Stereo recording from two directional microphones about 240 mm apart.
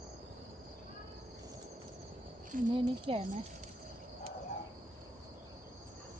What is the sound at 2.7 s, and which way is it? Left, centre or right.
Speech, right.